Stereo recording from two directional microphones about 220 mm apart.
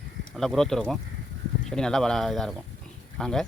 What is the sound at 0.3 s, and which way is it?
Speech, centre (ahead or behind).